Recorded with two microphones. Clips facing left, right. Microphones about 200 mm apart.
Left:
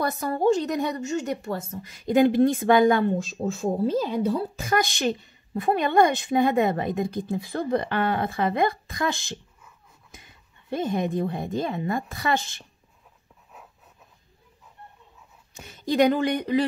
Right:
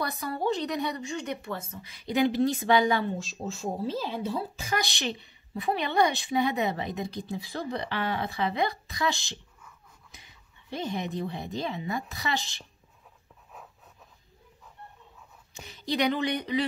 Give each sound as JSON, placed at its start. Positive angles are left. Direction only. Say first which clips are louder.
{"t": 0.0, "sound": "a woman's voice", "louder": "left 7 dB", "side_deg": 50}
{"t": 15.5, "sound": "a woman's voice", "louder": "left 7 dB", "side_deg": 50}